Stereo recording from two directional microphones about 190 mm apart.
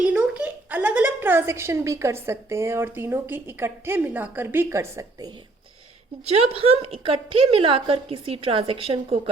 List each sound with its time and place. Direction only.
0.0 s a woman's voice: 5° right (ahead or behind)
6.2 s a woman's voice: 30° right (ahead or behind)